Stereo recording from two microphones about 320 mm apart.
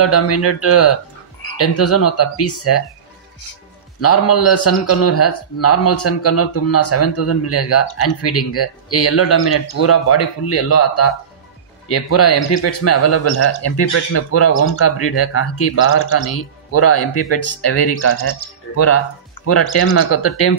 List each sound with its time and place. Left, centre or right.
0.0 s speech: left
4.0 s speech: left
19.4 s speech: left